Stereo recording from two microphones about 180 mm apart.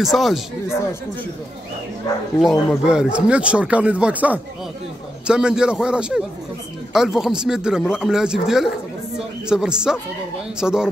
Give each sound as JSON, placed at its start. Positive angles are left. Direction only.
{"t": 0.0, "sound": "a man's voice", "side_deg": 0}
{"t": 2.4, "sound": "a man's voice", "side_deg": 0}